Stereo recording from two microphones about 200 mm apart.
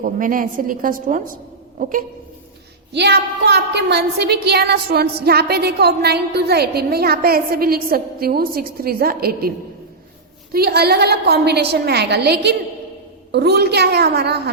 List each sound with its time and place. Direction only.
0.0 s a woman's voice: 40° right (ahead or behind)
2.9 s a woman's voice: 55° right (ahead or behind)
10.5 s a woman's voice: 50° right (ahead or behind)